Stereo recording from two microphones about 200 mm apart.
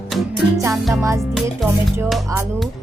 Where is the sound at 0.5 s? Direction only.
15° right (ahead or behind).